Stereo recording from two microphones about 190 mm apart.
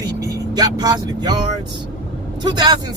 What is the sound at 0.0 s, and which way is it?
Vehicle, 20° right (ahead or behind).